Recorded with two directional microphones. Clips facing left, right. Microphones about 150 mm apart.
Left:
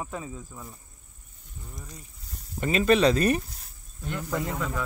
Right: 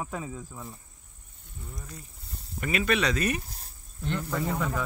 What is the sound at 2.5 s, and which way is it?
Speech, 30° left (ahead or behind).